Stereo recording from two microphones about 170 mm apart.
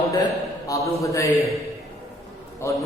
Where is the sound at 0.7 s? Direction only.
20° left (ahead or behind).